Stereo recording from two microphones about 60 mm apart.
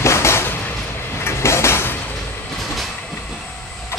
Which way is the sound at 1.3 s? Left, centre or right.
Left.